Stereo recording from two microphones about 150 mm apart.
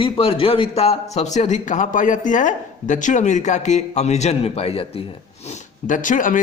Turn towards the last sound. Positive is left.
turn(degrees=60)  # may be behind; listen again after turning